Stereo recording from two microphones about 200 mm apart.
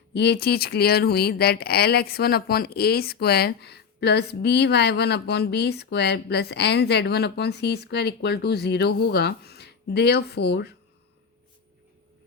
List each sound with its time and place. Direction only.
0.1 s speech: 55° left (ahead or behind)